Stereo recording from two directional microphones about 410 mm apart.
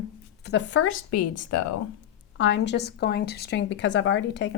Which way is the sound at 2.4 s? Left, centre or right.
Left.